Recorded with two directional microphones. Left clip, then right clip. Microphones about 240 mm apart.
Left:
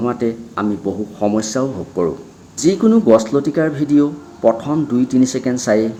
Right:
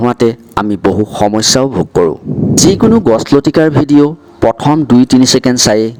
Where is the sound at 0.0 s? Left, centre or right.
Right.